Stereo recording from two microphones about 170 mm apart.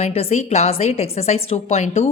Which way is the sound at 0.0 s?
40° left (ahead or behind).